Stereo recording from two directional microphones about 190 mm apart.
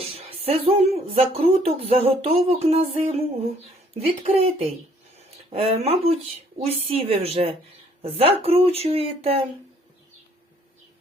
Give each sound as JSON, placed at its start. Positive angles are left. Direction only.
{"t": 0.0, "sound": "speech", "side_deg": -30}